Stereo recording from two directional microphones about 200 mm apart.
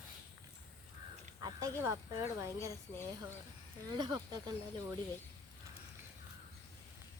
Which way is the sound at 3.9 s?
20° right (ahead or behind).